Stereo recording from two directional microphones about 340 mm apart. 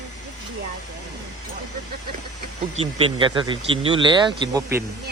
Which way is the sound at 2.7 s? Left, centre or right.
Centre.